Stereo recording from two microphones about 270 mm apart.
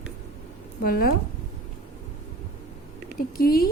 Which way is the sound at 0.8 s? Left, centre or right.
Left.